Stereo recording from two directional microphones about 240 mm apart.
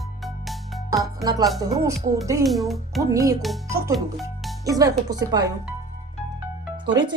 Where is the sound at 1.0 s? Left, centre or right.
Centre.